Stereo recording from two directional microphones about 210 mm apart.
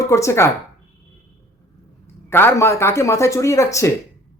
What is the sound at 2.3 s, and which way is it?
Speech, 10° left (ahead or behind).